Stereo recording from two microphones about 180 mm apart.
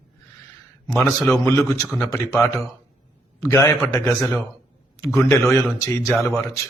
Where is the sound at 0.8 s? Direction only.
15° left (ahead or behind).